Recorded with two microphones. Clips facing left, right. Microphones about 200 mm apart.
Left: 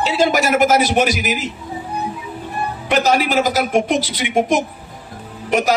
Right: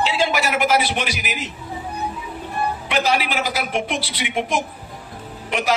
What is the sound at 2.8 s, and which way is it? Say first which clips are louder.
A woman's voice: left 7 dB; 45° left (ahead or behind).